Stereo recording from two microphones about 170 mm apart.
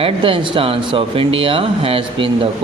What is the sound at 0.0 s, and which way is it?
Speech, 30° right (ahead or behind).